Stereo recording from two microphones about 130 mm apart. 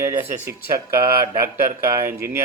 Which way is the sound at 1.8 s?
20° right (ahead or behind).